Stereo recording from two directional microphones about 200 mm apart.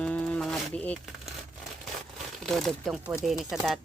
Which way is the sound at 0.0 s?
5° left (ahead or behind).